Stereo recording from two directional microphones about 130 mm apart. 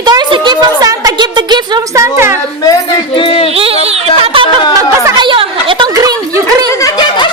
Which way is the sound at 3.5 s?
50° right (ahead or behind).